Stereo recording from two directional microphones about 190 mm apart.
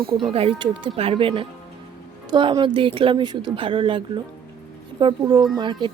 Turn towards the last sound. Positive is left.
turn(degrees=-20)  # may be behind; listen again after turning